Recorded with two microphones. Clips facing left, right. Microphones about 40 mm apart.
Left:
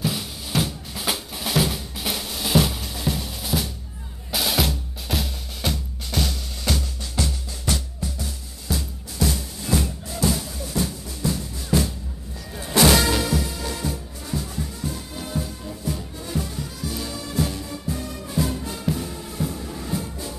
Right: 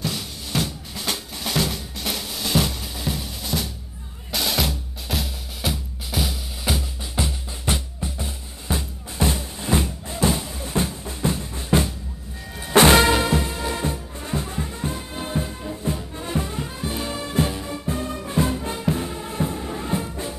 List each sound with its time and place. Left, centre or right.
0.0 s drum: centre; by 9.8 s right
9.8 s music: right